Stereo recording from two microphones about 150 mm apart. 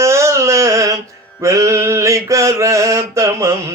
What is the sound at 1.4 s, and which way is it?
Mantra, 20° right (ahead or behind).